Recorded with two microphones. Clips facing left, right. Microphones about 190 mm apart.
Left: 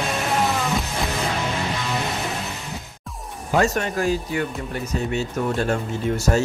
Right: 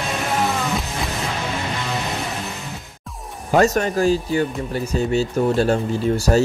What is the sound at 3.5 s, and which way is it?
Speech, 40° right (ahead or behind).